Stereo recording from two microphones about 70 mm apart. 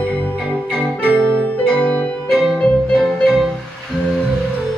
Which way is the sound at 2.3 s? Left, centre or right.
Centre.